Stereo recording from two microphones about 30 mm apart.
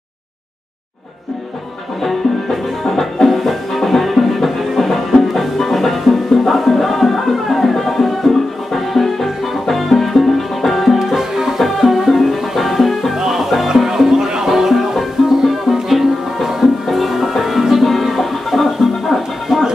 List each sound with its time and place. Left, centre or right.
2.0 s music: centre
11.0 s music: centre